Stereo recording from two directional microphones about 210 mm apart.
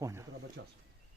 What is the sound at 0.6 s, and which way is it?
Speech, 55° right (ahead or behind).